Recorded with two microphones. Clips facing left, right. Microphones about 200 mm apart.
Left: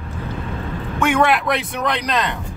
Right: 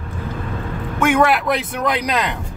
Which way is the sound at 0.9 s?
5° right (ahead or behind).